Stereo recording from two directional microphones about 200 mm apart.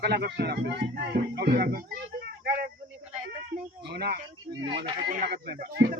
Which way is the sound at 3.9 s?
55° right (ahead or behind).